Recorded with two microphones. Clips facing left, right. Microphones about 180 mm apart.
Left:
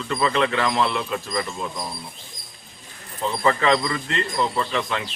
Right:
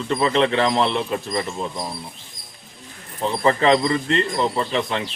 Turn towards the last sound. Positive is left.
turn(degrees=-25)  # may be behind; listen again after turning